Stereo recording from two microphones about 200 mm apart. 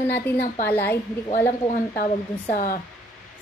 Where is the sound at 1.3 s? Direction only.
40° left (ahead or behind).